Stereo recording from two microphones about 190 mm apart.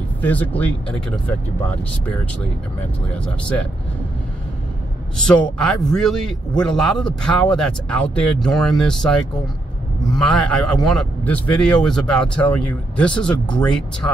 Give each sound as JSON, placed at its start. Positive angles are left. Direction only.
{"t": 0.2, "sound": "speech", "side_deg": 10}
{"t": 5.1, "sound": "speech", "side_deg": 5}